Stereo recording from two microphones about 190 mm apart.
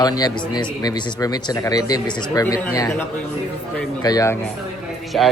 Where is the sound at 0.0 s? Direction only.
20° left (ahead or behind).